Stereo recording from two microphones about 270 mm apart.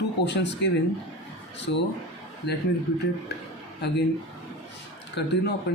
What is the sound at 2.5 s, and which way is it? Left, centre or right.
Speech, left.